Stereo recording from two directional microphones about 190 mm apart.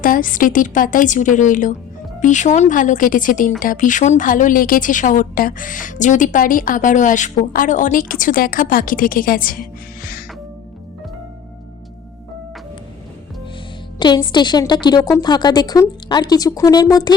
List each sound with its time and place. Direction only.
0.0 s a woman's voice: 45° left (ahead or behind)
14.0 s a woman's voice: 25° left (ahead or behind)